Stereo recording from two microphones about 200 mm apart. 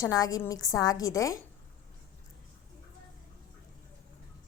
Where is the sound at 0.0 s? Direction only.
20° left (ahead or behind).